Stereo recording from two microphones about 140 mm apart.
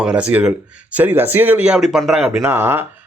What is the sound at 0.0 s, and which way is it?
Speech, 5° right (ahead or behind).